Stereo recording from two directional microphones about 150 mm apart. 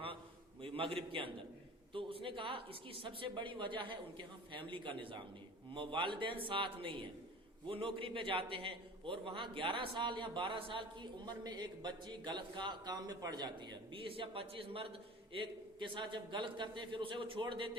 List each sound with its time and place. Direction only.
0.6 s a man's voice: 35° right (ahead or behind)